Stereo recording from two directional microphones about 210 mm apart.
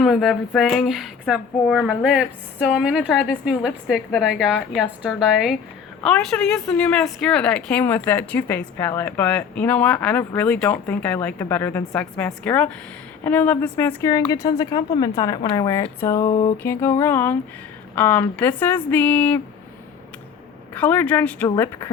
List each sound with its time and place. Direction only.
0.0 s a woman's voice: centre (ahead or behind); by 16.6 s 25° left (ahead or behind)
16.6 s a woman's voice: 10° left (ahead or behind)
20.7 s a woman's voice: 10° left (ahead or behind)